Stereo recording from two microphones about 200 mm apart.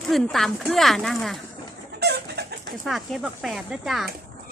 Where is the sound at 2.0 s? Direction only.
55° right (ahead or behind).